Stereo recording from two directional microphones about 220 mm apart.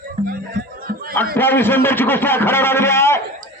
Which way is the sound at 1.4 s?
10° left (ahead or behind).